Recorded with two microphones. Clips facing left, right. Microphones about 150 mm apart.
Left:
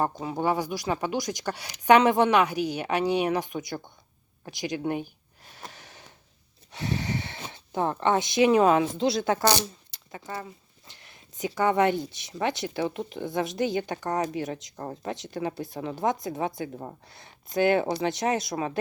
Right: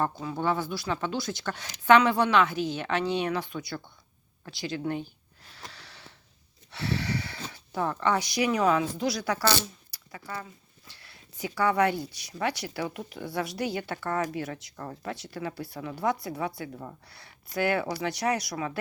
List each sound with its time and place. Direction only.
0.0 s a woman's voice: 20° left (ahead or behind)
5.5 s a sound: 20° left (ahead or behind)
6.7 s speech: 20° left (ahead or behind)
14.8 s speech: 35° left (ahead or behind)
15.1 s speech: 20° left (ahead or behind)